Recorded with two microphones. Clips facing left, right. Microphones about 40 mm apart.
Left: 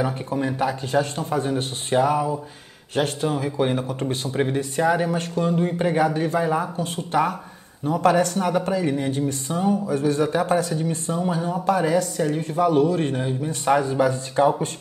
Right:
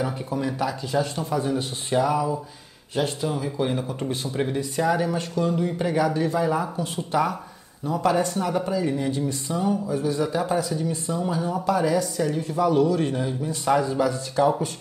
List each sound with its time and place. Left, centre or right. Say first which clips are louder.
0.3 s a man's voice: left 2 dB; left
2.9 s a man's voice: left 2 dB; left
6.8 s a man's voice: left 2 dB; left